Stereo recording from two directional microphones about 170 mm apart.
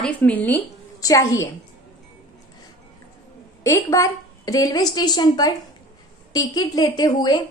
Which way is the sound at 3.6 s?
20° left (ahead or behind).